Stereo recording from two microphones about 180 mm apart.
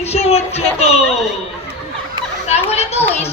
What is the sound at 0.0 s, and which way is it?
A woman's voice, 35° left (ahead or behind).